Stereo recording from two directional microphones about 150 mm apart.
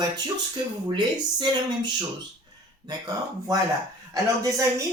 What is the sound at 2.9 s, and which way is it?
Speech, 25° right (ahead or behind).